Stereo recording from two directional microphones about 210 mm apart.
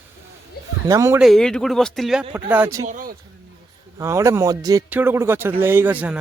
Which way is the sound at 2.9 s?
40° right (ahead or behind).